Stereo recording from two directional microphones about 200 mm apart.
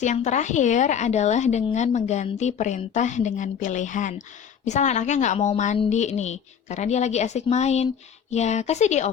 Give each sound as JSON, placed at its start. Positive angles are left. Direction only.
{"t": 0.0, "sound": "a woman's voice", "side_deg": 35}